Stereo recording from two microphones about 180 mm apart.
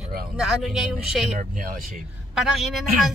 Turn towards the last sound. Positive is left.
turn(degrees=0)  # may be behind; listen again after turning